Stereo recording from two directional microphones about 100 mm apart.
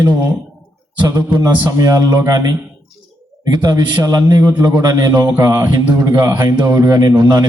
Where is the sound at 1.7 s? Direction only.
35° right (ahead or behind).